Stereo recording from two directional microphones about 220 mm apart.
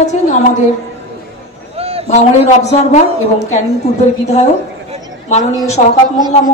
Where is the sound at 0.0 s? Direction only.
30° left (ahead or behind).